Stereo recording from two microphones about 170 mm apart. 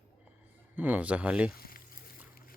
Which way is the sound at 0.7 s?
10° right (ahead or behind).